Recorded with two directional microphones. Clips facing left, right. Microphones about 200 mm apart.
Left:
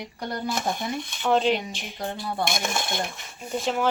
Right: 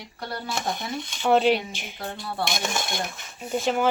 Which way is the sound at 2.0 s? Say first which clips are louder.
Left 2 dB; 15° left (ahead or behind).